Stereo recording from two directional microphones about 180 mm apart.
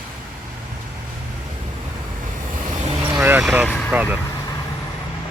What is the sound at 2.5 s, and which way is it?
Vehicle, 40° right (ahead or behind).